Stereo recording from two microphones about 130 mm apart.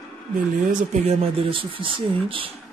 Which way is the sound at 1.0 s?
45° right (ahead or behind).